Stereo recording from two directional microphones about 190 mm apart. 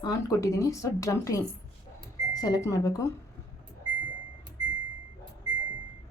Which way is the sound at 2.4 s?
20° left (ahead or behind).